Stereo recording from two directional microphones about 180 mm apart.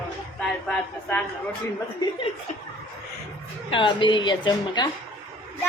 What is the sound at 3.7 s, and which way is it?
A woman's voice, 25° left (ahead or behind).